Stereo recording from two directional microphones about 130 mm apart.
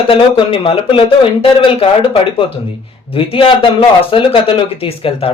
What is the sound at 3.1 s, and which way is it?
Speech, 45° left (ahead or behind).